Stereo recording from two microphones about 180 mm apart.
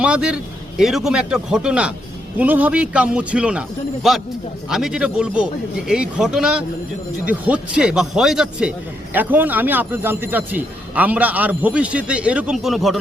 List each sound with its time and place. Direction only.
0.0 s a man's voice: 5° right (ahead or behind)